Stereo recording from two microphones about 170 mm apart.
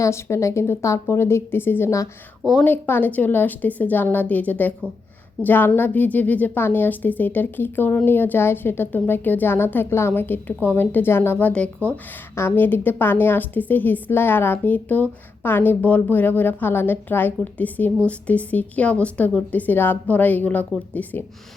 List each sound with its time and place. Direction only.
0.0 s a woman's voice: 15° left (ahead or behind)